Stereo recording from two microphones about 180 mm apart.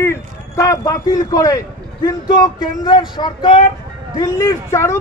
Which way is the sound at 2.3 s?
25° left (ahead or behind).